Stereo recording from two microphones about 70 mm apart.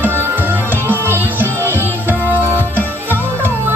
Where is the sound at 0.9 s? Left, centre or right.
Right.